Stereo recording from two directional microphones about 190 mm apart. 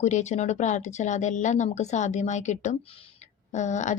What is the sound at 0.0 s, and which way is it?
Speech, 40° left (ahead or behind).